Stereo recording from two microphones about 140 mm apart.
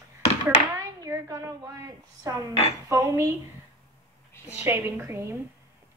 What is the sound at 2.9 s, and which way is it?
Speech, 25° right (ahead or behind).